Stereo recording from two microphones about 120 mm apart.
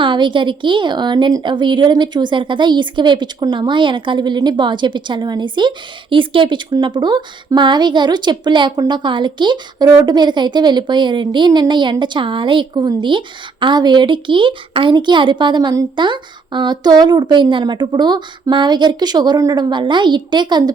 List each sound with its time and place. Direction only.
0.0 s speech: 40° right (ahead or behind)